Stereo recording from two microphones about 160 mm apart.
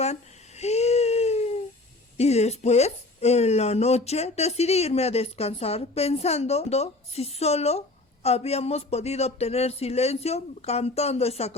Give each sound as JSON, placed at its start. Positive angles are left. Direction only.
{"t": 0.0, "sound": "babbling", "side_deg": 45}
{"t": 2.1, "sound": "speech", "side_deg": 40}